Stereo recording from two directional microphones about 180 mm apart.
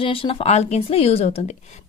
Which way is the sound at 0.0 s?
30° left (ahead or behind).